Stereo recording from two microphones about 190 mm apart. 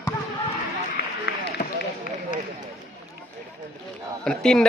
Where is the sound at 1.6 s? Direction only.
45° left (ahead or behind).